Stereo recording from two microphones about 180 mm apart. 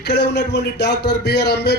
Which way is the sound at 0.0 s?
70° left (ahead or behind).